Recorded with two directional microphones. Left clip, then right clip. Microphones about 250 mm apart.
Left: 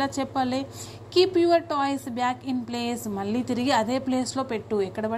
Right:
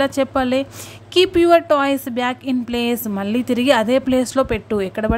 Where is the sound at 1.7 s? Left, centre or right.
Right.